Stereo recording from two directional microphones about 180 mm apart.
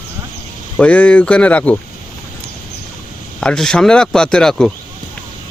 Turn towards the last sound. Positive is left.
turn(degrees=5)  # may be behind; listen again after turning